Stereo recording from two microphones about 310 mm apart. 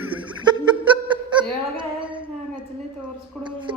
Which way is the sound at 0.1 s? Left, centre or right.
Centre.